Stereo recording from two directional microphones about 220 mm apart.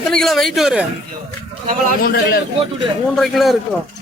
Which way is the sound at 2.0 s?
45° left (ahead or behind).